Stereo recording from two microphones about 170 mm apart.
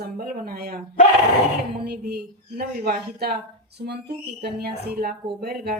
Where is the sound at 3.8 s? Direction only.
75° right (ahead or behind).